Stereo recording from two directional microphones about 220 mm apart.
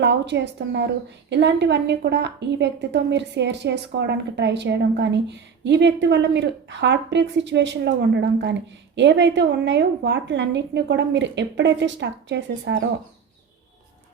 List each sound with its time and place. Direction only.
0.0 s a woman's voice: 50° right (ahead or behind)